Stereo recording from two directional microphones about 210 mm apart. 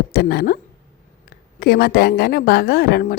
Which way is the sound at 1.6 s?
45° left (ahead or behind).